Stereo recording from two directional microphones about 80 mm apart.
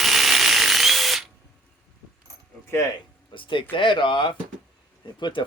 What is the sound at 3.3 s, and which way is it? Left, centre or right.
Speech, left.